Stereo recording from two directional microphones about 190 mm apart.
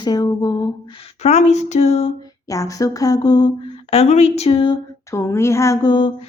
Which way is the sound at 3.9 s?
35° left (ahead or behind).